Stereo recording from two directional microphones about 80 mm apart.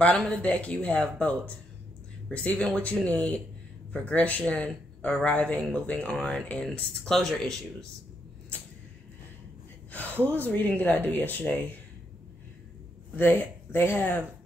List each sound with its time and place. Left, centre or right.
0.2 s speech: centre
2.3 s speech: centre
9.8 s gasp: left
10.2 s speech: left
13.1 s speech: left